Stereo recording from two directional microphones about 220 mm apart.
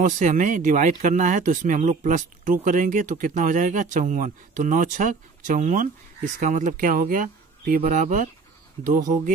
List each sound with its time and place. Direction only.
0.0 s speech: 35° right (ahead or behind)